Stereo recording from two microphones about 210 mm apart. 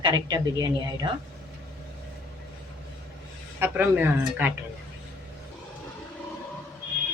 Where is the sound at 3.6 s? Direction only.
10° right (ahead or behind).